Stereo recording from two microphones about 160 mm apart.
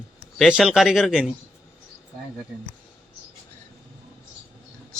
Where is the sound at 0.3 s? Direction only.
Centre (ahead or behind).